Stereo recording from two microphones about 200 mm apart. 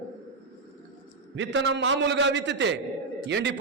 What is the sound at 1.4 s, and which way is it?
A man's voice, 65° right (ahead or behind).